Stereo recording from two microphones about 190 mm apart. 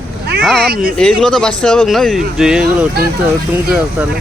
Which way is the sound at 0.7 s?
50° right (ahead or behind).